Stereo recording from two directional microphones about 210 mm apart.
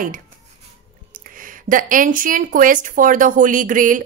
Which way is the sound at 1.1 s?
40° right (ahead or behind).